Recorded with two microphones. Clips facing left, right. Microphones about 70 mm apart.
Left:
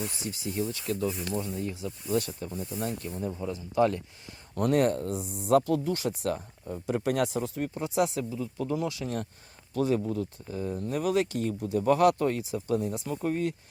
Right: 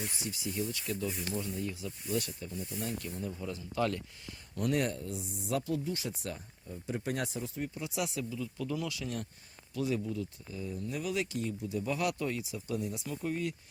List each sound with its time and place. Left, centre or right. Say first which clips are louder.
0.3 s speech: left 4 dB; left
1.0 s speech: left 6 dB; left
1.4 s speech: left 4 dB; left
3.4 s speech: left 8 dB; left
4.5 s speech: left 7 dB; left
9.7 s speech: left 6 dB; left